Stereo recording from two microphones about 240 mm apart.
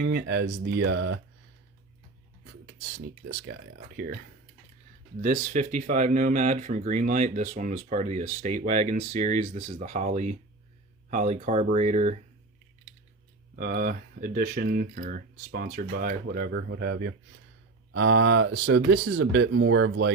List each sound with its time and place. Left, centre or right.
0.0 s speech: right
3.2 s speech: right
5.2 s speech: right
13.6 s speech: right